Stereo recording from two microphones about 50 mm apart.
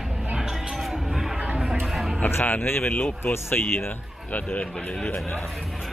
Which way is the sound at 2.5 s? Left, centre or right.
Left.